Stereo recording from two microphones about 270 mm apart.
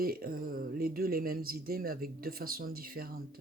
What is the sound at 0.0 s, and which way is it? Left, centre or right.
Speech, right.